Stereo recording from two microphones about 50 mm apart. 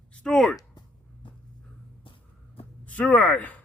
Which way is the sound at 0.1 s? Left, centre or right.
Centre.